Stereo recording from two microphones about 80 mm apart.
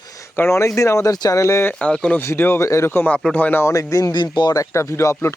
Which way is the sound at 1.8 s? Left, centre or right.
Centre.